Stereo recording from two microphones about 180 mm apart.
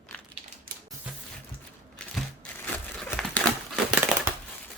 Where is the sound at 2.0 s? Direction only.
5° left (ahead or behind).